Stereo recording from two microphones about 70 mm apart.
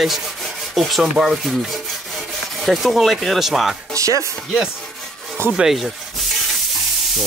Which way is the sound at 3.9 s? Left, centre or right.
Right.